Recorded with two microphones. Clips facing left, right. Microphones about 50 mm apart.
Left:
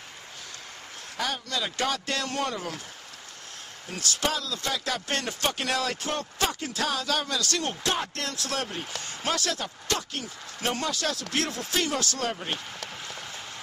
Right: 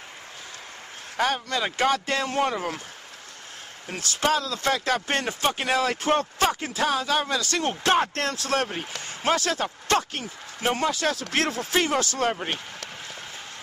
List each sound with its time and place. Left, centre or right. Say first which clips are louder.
1.1 s speech: right 6 dB; right
3.9 s speech: right 5 dB; right
5.9 s speech: right 7 dB; right
7.8 s speech: right 7 dB; right
10.6 s speech: right 5 dB; right